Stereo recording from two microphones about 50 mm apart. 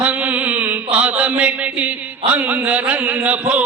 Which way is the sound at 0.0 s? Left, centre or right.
Right.